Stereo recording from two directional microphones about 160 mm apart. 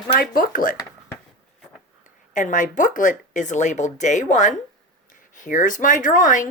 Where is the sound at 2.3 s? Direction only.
50° left (ahead or behind).